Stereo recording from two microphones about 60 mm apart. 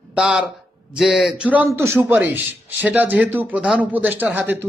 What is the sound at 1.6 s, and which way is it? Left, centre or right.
Speech, right.